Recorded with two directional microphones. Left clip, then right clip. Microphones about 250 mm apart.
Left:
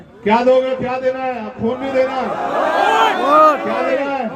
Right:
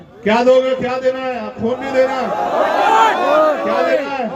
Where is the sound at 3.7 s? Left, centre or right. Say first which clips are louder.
Right 2 dB; right.